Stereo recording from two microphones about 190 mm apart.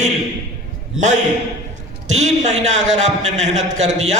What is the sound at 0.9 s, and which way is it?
A man's voice, 40° right (ahead or behind).